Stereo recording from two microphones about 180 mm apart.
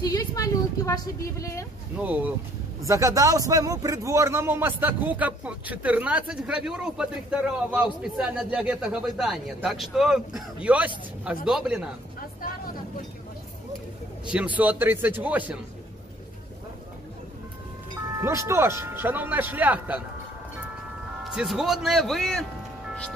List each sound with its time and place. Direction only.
0.0 s a woman's voice: 20° left (ahead or behind)
2.0 s a man's voice: 10° right (ahead or behind)
14.2 s a man's voice: 5° right (ahead or behind)
18.2 s a man's voice: 15° right (ahead or behind)
21.2 s speech: centre (ahead or behind)